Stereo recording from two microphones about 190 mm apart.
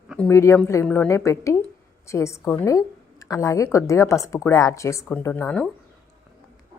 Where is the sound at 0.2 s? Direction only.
15° left (ahead or behind).